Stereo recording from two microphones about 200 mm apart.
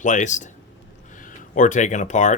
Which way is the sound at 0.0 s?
40° left (ahead or behind).